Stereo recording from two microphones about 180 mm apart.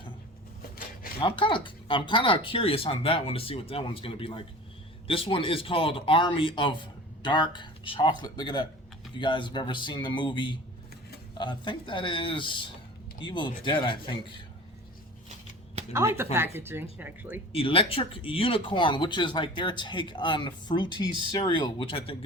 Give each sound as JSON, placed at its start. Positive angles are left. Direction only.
{"t": 1.2, "sound": "speech", "side_deg": 25}
{"t": 15.9, "sound": "speech", "side_deg": -15}
{"t": 17.5, "sound": "speech", "side_deg": 30}